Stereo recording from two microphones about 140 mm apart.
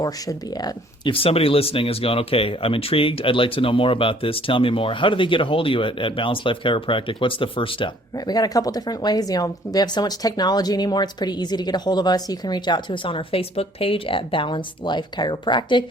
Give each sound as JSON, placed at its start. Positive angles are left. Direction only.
{"t": 0.0, "sound": "speech", "side_deg": 30}
{"t": 8.3, "sound": "speech", "side_deg": 25}